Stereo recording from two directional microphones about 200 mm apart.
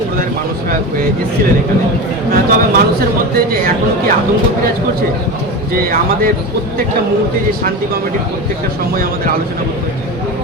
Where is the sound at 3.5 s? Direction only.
45° right (ahead or behind).